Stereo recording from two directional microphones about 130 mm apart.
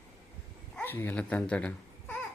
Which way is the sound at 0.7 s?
15° left (ahead or behind).